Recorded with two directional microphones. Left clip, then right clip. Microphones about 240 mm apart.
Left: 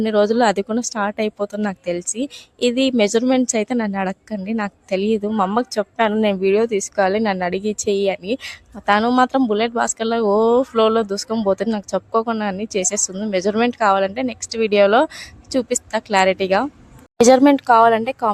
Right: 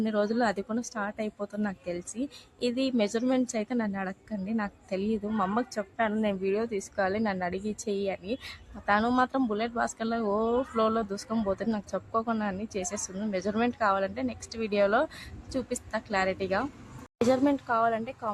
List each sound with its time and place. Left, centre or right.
0.0 s a woman's voice: left